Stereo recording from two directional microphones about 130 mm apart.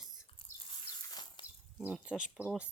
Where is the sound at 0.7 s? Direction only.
30° left (ahead or behind).